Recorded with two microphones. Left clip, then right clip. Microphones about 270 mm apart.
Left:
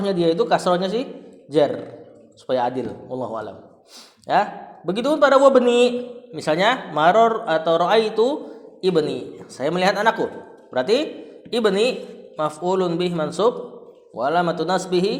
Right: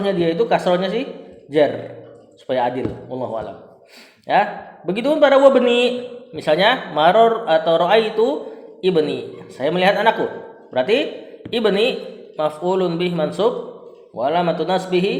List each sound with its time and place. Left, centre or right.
0.0 s a man's voice: left